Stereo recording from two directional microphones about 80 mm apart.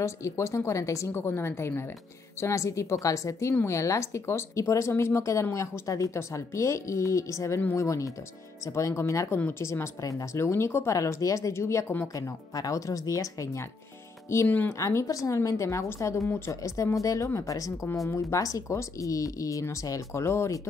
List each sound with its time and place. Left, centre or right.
0.0 s speech: left
2.4 s speech: left
11.0 s speech: left
14.7 s speech: left